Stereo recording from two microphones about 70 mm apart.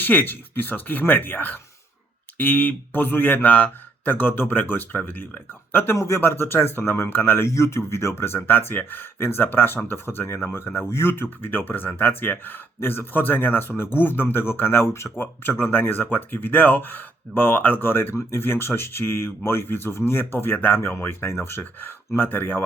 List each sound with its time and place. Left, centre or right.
0.0 s speech: left